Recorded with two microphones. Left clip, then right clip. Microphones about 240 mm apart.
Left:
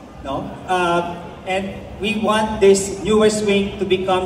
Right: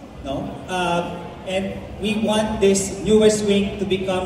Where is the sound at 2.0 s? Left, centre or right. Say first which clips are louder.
Left 3 dB; left.